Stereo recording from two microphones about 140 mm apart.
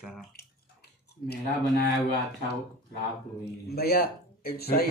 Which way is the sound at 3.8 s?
90° left.